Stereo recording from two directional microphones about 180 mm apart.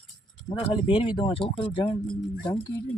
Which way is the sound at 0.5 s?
30° left (ahead or behind).